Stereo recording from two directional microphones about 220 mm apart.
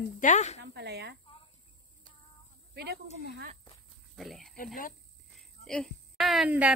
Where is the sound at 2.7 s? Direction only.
45° right (ahead or behind).